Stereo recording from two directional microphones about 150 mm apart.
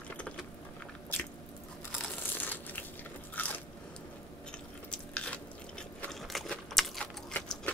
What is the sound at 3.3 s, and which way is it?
Biting, 10° left (ahead or behind).